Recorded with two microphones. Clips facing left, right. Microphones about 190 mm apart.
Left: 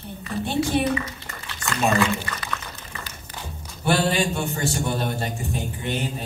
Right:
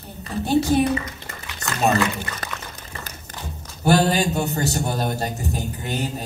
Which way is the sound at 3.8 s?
40° right (ahead or behind).